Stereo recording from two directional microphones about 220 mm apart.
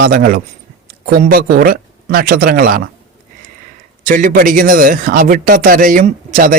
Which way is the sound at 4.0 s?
35° right (ahead or behind).